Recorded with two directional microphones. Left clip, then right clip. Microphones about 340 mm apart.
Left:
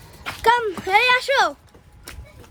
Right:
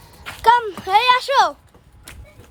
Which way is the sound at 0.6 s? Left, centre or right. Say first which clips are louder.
Right 2 dB; centre.